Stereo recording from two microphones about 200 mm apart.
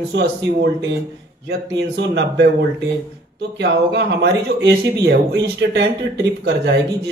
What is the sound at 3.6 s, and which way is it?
Speech, 60° right (ahead or behind).